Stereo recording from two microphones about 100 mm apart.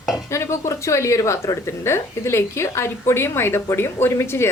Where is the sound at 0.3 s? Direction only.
30° left (ahead or behind).